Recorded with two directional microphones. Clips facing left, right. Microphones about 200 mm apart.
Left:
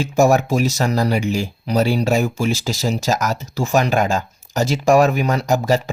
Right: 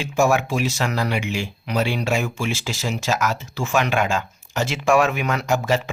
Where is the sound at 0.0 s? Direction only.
40° left (ahead or behind).